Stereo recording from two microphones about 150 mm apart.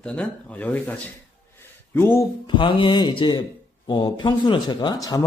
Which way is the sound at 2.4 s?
35° left (ahead or behind).